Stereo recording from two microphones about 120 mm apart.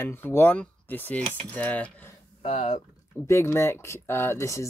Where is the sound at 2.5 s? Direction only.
65° left (ahead or behind).